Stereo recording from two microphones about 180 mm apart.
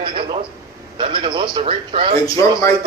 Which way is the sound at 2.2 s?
15° left (ahead or behind).